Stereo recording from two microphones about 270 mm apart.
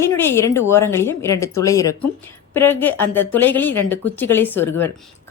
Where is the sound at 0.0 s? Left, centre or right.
Centre.